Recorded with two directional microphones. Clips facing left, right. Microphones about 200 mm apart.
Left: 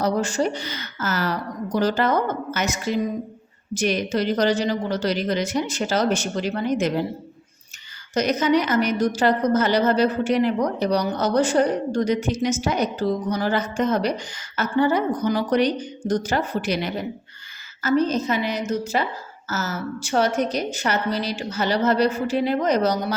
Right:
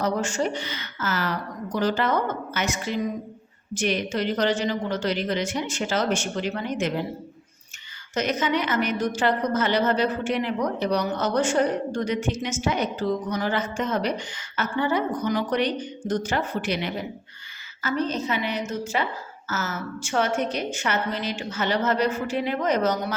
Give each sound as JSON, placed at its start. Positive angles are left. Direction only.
{"t": 0.0, "sound": "a woman's voice", "side_deg": 35}
{"t": 8.1, "sound": "a woman's voice", "side_deg": 40}